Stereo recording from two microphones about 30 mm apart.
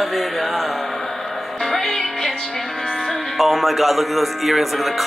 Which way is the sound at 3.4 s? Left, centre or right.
Centre.